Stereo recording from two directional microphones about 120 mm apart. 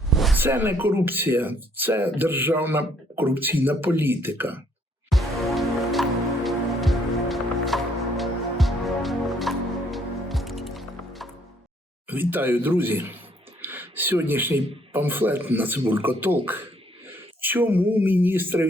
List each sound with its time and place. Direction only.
0.1 s a sound: centre (ahead or behind)
0.3 s speech: 20° right (ahead or behind)
5.0 s music: centre (ahead or behind)
12.0 s speech: 15° right (ahead or behind)